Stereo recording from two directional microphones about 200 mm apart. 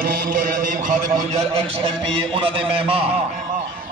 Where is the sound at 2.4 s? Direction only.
25° right (ahead or behind).